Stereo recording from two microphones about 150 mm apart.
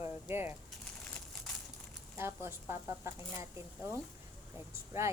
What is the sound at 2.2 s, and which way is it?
Speech, 15° right (ahead or behind).